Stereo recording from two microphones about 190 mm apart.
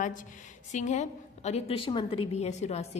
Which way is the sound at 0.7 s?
40° left (ahead or behind).